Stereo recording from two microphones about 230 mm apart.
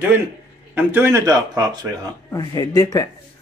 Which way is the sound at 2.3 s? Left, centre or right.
Centre.